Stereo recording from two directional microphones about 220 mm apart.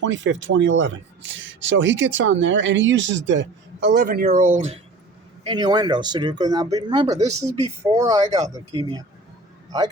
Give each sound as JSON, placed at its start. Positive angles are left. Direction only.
{"t": 0.0, "sound": "speech", "side_deg": -60}
{"t": 5.4, "sound": "speech", "side_deg": -20}